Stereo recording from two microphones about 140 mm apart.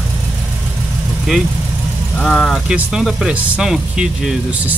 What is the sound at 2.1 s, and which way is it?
Speech, 5° left (ahead or behind).